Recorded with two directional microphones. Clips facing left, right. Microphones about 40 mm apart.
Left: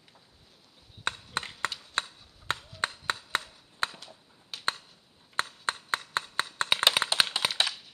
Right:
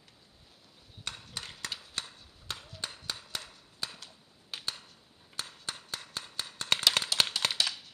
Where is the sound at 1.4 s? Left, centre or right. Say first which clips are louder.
Left 7 dB; left.